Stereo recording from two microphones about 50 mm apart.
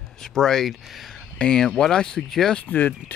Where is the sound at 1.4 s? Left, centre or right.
Centre.